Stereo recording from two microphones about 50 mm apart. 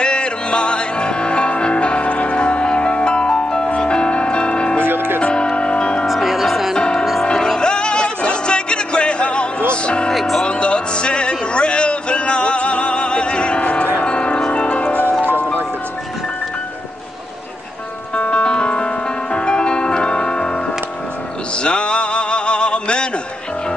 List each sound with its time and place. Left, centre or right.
0.0 s music: centre
4.8 s music: right
5.2 s music: centre
6.0 s music: centre
6.8 s music: centre
10.1 s music: centre
10.4 s music: left
18.1 s music: left
21.5 s a sound: left